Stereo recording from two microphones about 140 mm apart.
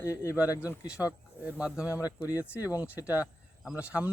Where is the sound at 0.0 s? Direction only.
20° left (ahead or behind).